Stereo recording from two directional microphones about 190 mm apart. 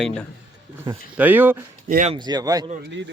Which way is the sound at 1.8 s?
40° right (ahead or behind).